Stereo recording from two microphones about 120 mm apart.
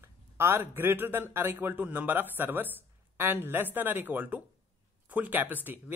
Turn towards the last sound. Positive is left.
turn(degrees=-15)  # may be behind; listen again after turning